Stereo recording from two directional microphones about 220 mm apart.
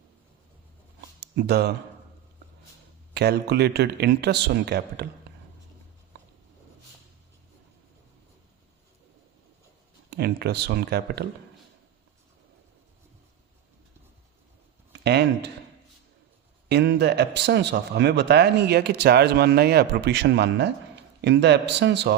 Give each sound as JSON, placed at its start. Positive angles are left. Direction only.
{"t": 1.2, "sound": "speech", "side_deg": -50}
{"t": 3.2, "sound": "speech", "side_deg": -45}
{"t": 10.1, "sound": "speech", "side_deg": -45}
{"t": 14.9, "sound": "speech", "side_deg": -50}
{"t": 16.6, "sound": "speech", "side_deg": -50}